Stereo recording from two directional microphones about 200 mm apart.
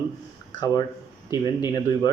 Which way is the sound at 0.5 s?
20° left (ahead or behind).